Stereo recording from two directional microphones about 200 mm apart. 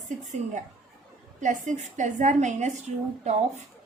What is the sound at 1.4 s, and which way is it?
A woman's voice, 35° right (ahead or behind).